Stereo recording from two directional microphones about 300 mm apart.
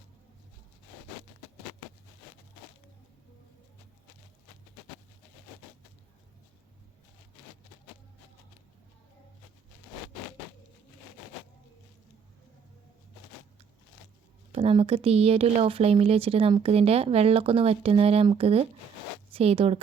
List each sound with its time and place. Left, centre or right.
14.5 s speech: centre